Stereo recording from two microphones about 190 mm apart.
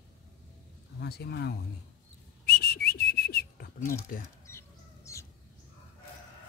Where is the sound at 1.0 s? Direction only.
60° left (ahead or behind).